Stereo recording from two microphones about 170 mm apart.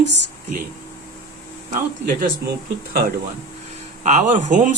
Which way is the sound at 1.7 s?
55° right (ahead or behind).